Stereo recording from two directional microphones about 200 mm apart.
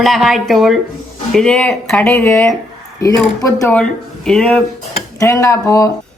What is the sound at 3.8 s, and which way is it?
A woman's voice, 5° left (ahead or behind).